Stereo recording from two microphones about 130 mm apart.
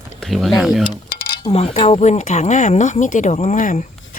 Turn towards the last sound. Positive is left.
turn(degrees=80)